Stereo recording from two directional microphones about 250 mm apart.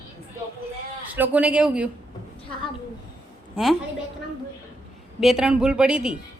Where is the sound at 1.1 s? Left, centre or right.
Centre.